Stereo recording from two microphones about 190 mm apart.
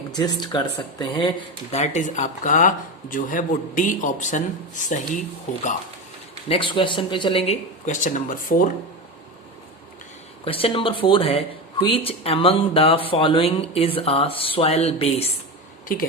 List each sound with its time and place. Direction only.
0.1 s speech: 20° left (ahead or behind); by 5.0 s 40° left (ahead or behind)
6.5 s speech: 25° left (ahead or behind); by 8.7 s 45° left (ahead or behind)
10.4 s speech: 30° left (ahead or behind)